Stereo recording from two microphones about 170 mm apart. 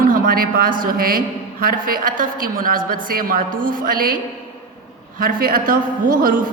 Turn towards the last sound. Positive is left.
turn(degrees=-55)  # may be behind; listen again after turning